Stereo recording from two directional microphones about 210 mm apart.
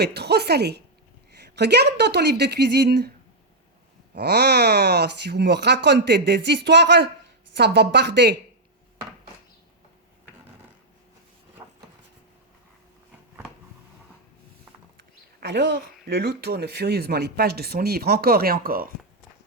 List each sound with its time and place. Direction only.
0.0 s speech: 50° right (ahead or behind)
4.1 s speech: 50° right (ahead or behind)
11.6 s a sound: 25° right (ahead or behind)
15.4 s speech: 55° right (ahead or behind)